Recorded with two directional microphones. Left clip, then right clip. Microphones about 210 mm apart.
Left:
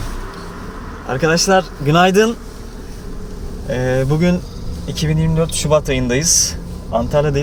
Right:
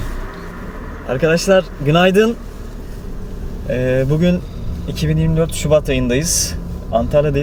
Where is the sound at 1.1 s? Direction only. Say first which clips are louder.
Right 1 dB; centre (ahead or behind).